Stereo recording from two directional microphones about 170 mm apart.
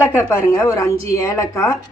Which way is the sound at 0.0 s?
10° left (ahead or behind).